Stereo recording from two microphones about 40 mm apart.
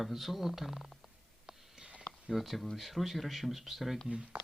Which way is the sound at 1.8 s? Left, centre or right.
Right.